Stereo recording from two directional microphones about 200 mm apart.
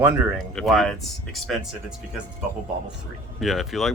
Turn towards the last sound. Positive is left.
turn(degrees=0)  # may be behind; listen again after turning